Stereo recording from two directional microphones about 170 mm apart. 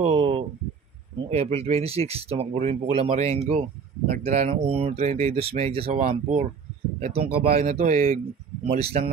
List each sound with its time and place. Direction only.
0.0 s a sound: 35° right (ahead or behind)
1.3 s speech: 40° right (ahead or behind)
7.0 s speech: 60° right (ahead or behind)
7.7 s speech: 50° right (ahead or behind)
8.6 s speech: 35° right (ahead or behind)